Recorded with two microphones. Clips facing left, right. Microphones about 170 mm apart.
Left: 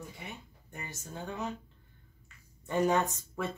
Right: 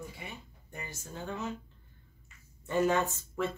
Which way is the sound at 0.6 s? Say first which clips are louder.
Even; 15° left (ahead or behind).